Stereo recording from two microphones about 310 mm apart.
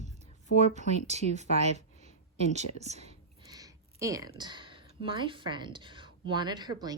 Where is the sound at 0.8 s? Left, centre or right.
Right.